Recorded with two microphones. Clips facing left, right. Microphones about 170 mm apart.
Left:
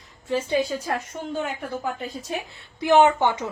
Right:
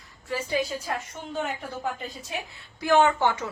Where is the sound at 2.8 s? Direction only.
20° left (ahead or behind).